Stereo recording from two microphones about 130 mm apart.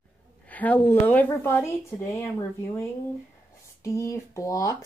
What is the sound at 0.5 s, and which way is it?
Speech, 10° left (ahead or behind).